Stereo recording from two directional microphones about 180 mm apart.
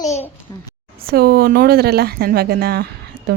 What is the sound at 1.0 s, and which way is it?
Speech, 55° right (ahead or behind).